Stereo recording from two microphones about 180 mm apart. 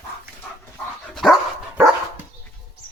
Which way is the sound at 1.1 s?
Centre (ahead or behind).